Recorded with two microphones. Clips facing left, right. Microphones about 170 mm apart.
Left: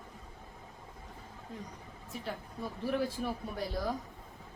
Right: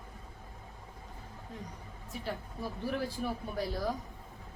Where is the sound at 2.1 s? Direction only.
Centre (ahead or behind).